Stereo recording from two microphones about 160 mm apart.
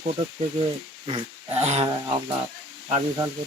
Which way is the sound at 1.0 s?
40° right (ahead or behind).